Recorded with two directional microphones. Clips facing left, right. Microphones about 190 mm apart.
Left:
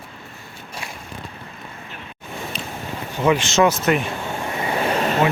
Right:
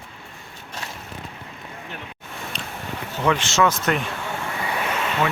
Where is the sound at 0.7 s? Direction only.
10° left (ahead or behind).